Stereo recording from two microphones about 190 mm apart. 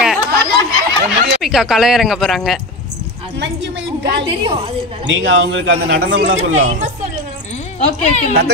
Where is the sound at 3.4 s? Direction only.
70° right (ahead or behind).